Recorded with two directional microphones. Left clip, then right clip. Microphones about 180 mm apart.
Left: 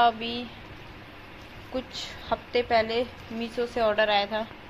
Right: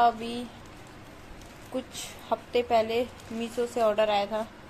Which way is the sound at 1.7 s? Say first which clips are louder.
Left 2 dB; 20° right (ahead or behind).